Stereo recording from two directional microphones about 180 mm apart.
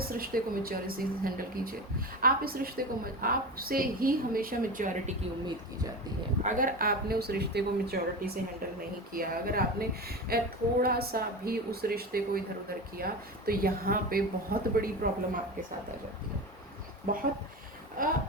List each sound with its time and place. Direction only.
0.1 s speech: 55° right (ahead or behind)
6.4 s a woman's voice: 50° right (ahead or behind)
17.1 s speech: 55° right (ahead or behind)